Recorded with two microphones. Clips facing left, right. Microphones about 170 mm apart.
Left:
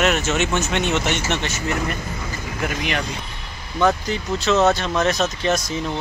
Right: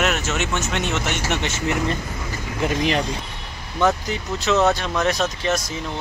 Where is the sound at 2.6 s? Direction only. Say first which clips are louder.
Right 4 dB; 30° right (ahead or behind).